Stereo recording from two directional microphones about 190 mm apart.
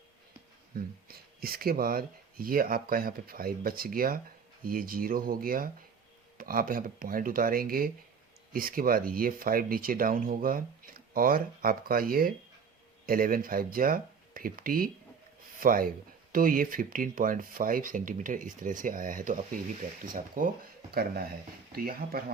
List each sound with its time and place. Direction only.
0.7 s speech: 50° right (ahead or behind)